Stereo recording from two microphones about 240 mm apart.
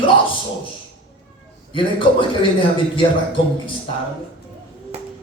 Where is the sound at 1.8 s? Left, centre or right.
Left.